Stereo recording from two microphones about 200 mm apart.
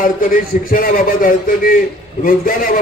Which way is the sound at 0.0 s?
45° left (ahead or behind).